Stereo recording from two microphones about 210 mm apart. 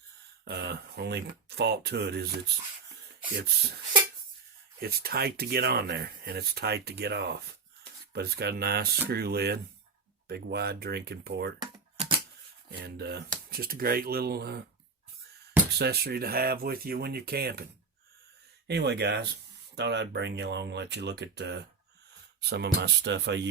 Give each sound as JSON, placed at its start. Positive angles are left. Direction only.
{"t": 0.4, "sound": "speech", "side_deg": -50}
{"t": 3.2, "sound": "speech", "side_deg": -50}
{"t": 4.8, "sound": "speech", "side_deg": -45}
{"t": 11.6, "sound": "typing", "side_deg": -20}
{"t": 12.8, "sound": "speech", "side_deg": -55}
{"t": 15.8, "sound": "speech", "side_deg": -50}
{"t": 18.7, "sound": "speech", "side_deg": -50}